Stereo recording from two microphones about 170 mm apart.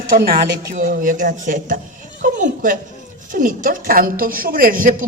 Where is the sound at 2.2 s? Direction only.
50° right (ahead or behind).